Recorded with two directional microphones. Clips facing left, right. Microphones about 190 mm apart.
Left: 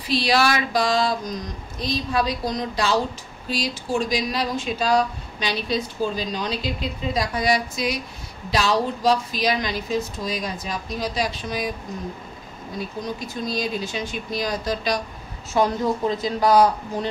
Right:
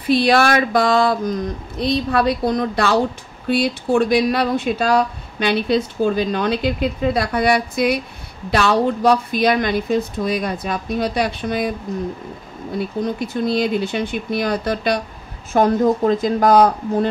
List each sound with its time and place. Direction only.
0.0 s speech: 55° right (ahead or behind)
12.7 s speech: 60° right (ahead or behind)